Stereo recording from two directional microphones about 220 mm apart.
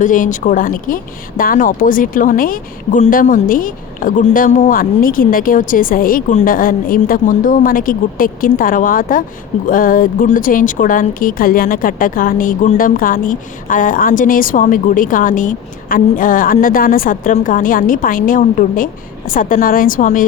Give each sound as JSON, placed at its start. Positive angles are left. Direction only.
{"t": 0.0, "sound": "a woman's voice", "side_deg": 35}